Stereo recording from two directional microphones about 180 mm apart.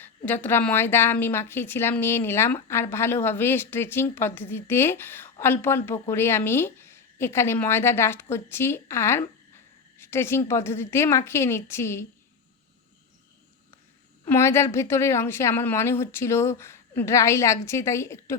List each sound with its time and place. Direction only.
0.3 s a woman's voice: 10° left (ahead or behind)
14.3 s a woman's voice: 15° left (ahead or behind)